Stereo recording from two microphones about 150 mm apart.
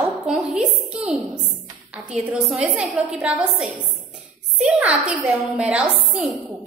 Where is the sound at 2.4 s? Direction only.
5° right (ahead or behind).